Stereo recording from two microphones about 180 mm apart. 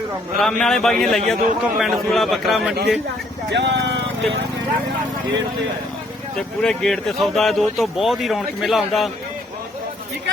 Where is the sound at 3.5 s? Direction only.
75° right (ahead or behind).